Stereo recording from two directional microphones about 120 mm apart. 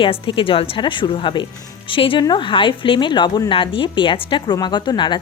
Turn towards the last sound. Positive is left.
turn(degrees=40)  # may be behind; listen again after turning